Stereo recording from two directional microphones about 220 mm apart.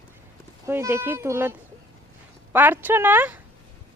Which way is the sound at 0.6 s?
10° right (ahead or behind).